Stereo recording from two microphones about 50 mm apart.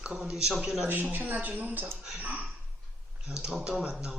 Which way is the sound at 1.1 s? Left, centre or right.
Right.